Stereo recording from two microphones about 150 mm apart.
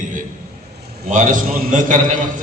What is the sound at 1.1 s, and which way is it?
Speech, 55° right (ahead or behind).